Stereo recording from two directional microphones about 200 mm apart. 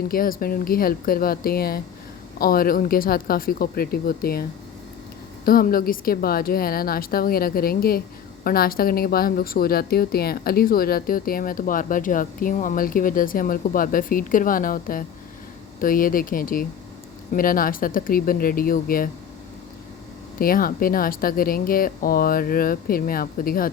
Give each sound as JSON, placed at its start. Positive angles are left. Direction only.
{"t": 0.1, "sound": "a woman's voice", "side_deg": 45}
{"t": 5.5, "sound": "a woman's voice", "side_deg": 45}
{"t": 20.4, "sound": "a woman's voice", "side_deg": 45}